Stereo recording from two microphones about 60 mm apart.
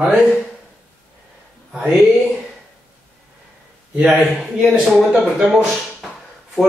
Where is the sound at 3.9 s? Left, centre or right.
Centre.